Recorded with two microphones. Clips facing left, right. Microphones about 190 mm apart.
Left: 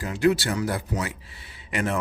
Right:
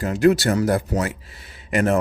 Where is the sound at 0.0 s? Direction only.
45° right (ahead or behind).